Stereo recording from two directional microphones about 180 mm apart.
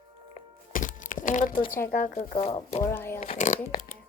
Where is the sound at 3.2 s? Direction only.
30° left (ahead or behind).